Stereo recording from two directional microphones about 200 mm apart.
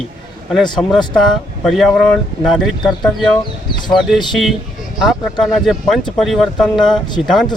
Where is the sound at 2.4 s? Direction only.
Centre (ahead or behind).